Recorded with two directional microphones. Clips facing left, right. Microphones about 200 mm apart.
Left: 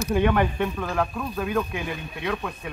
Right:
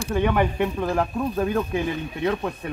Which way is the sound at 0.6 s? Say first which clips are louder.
Right 3 dB; 25° right (ahead or behind).